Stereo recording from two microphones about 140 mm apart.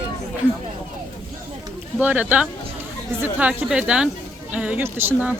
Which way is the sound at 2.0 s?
10° right (ahead or behind).